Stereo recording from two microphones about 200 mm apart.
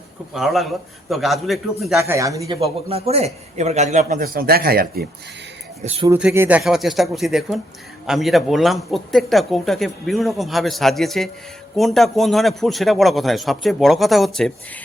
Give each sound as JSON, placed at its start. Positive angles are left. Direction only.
{"t": 0.3, "sound": "speech", "side_deg": 0}
{"t": 2.0, "sound": "speech", "side_deg": -15}
{"t": 2.6, "sound": "a man's voice", "side_deg": -30}
{"t": 5.8, "sound": "a man's voice", "side_deg": -30}
{"t": 6.1, "sound": "speech", "side_deg": -10}